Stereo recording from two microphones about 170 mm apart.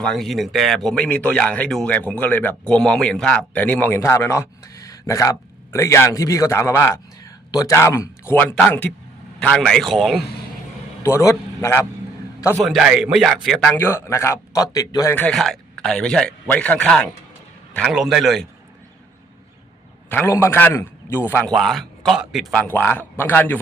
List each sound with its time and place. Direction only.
0.0 s speech: centre (ahead or behind)
11.0 s a man's voice: 20° left (ahead or behind)
12.6 s speech: centre (ahead or behind)
13.7 s speech: 15° left (ahead or behind)
20.1 s speech: 15° left (ahead or behind)
21.5 s speech: centre (ahead or behind)
22.5 s speech: 10° left (ahead or behind)